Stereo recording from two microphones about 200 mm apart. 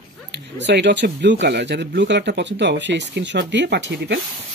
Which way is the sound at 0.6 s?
60° right (ahead or behind).